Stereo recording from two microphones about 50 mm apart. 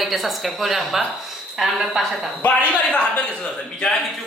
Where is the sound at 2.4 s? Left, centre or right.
Left.